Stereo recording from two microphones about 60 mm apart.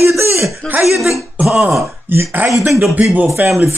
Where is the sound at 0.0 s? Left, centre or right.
Right.